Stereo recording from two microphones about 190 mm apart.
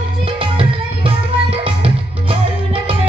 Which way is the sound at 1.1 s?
30° right (ahead or behind).